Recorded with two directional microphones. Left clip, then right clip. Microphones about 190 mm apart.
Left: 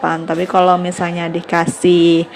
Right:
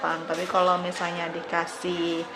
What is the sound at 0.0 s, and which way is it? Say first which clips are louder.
Speech: left 10 dB; 35° left (ahead or behind).